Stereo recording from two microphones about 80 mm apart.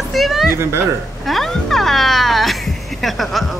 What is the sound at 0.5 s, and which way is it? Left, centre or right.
Speech, right.